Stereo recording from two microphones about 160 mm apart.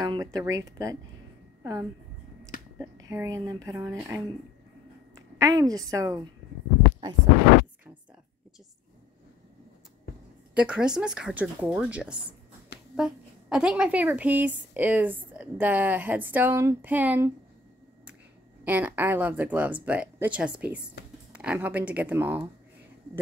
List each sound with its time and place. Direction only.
0.0 s a woman's voice: 25° right (ahead or behind)
10.5 s a woman's voice: 5° right (ahead or behind)
18.6 s a woman's voice: 10° right (ahead or behind)